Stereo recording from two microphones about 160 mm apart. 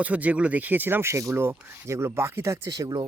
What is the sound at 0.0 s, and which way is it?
Speech, 10° right (ahead or behind).